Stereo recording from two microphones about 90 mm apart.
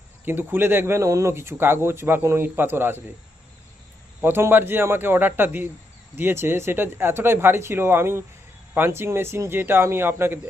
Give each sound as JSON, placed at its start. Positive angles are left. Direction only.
{"t": 0.3, "sound": "speech", "side_deg": -25}
{"t": 4.2, "sound": "speech", "side_deg": -25}